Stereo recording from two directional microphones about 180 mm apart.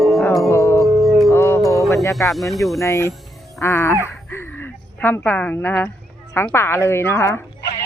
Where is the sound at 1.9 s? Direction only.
15° left (ahead or behind).